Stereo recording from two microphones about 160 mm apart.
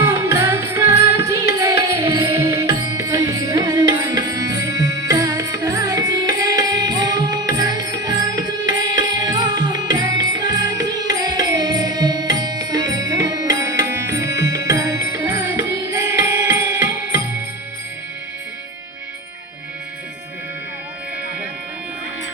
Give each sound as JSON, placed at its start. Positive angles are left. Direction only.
{"t": 0.0, "sound": "music", "side_deg": -20}